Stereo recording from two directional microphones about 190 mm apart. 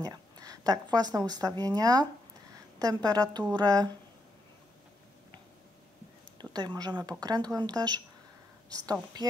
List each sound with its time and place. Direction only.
0.0 s speech: 20° right (ahead or behind)
6.4 s speech: 20° right (ahead or behind)